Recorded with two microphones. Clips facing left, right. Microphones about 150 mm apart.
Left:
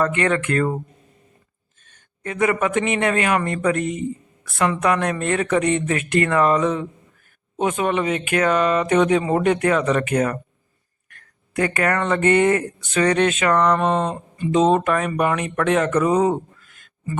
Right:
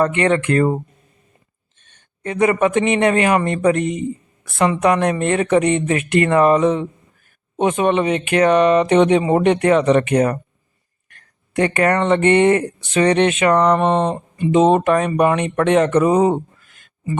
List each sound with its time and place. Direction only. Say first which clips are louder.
0.0 s speech: right 4 dB; 25° right (ahead or behind)
1.9 s speech: right 4 dB; 25° right (ahead or behind)